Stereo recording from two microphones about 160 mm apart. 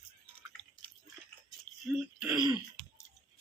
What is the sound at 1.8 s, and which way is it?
Speech, 10° right (ahead or behind).